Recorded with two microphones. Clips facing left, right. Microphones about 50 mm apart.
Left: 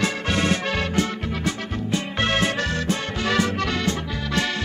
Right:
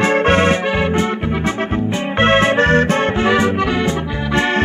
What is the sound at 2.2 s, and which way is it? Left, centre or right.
Music, right.